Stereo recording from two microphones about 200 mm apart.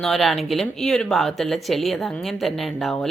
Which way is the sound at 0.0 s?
Centre (ahead or behind).